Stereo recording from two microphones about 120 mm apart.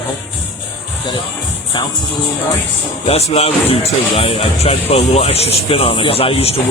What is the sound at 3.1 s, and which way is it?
Speech, 60° left (ahead or behind).